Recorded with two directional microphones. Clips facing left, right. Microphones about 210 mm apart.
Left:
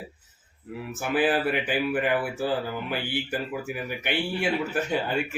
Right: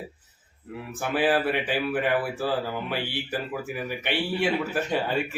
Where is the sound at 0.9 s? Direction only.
Centre (ahead or behind).